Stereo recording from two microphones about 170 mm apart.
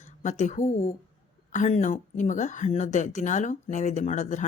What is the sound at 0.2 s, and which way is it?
Speech, 45° left (ahead or behind).